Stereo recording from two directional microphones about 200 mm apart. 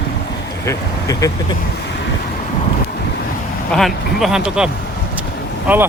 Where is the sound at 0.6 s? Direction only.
15° left (ahead or behind).